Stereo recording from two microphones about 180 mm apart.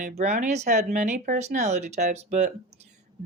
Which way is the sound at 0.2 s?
40° right (ahead or behind).